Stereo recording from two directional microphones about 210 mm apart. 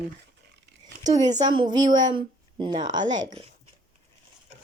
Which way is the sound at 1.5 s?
20° right (ahead or behind).